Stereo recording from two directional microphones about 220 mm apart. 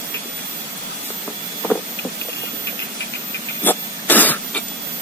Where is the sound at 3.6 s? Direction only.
10° left (ahead or behind).